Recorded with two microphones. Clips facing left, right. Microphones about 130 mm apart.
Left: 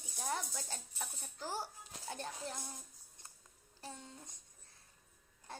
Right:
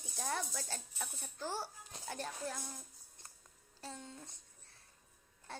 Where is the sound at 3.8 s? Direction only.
20° left (ahead or behind).